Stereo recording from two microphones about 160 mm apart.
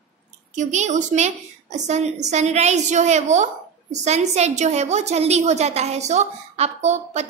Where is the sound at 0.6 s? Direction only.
45° right (ahead or behind).